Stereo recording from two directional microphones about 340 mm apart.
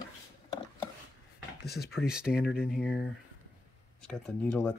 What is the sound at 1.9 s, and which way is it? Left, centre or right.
Speech, centre.